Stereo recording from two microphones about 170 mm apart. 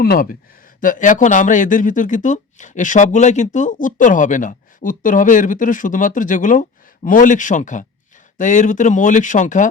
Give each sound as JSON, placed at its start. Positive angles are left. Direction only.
{"t": 0.0, "sound": "speech", "side_deg": 60}